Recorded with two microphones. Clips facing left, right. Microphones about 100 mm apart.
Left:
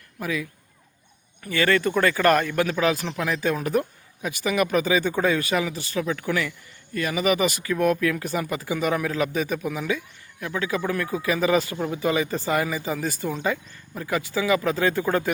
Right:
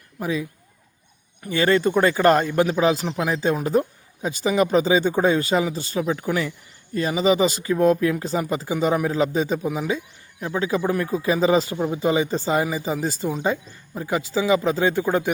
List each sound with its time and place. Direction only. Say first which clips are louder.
0.2 s speech: right 3 dB; 25° right (ahead or behind)